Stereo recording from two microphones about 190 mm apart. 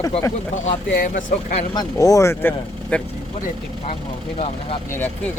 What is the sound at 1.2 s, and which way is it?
Speech, 35° left (ahead or behind).